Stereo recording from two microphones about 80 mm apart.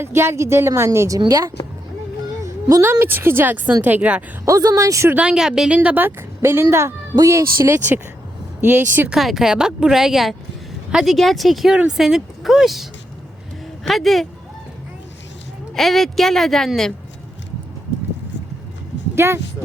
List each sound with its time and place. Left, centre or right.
0.0 s a woman's voice: right
4.4 s a woman's voice: right
5.1 s a woman's voice: centre; by 9.0 s right
9.0 s speech: centre
15.7 s speech: centre
19.1 s speech: right